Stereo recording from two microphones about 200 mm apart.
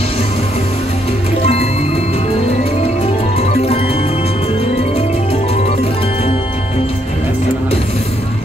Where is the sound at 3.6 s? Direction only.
30° left (ahead or behind).